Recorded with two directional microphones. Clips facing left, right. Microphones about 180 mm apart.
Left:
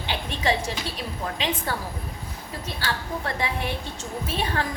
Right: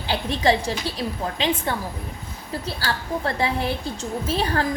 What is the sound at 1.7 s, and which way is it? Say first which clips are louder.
Speech: right 3 dB; 20° right (ahead or behind).